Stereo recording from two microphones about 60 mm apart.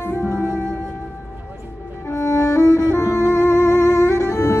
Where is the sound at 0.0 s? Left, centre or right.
Left.